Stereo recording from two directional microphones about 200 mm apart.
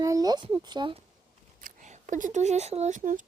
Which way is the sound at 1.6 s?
40° right (ahead or behind).